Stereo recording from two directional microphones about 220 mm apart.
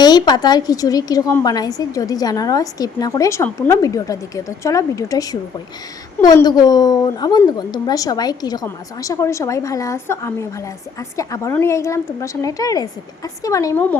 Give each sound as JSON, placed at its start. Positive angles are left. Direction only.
{"t": 0.0, "sound": "a woman's voice", "side_deg": 20}